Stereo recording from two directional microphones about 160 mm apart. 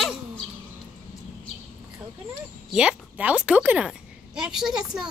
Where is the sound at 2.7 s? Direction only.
5° right (ahead or behind).